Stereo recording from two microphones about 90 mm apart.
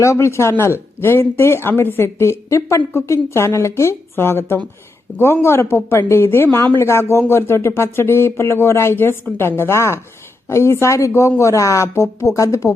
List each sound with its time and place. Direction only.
0.0 s a woman's voice: 30° left (ahead or behind)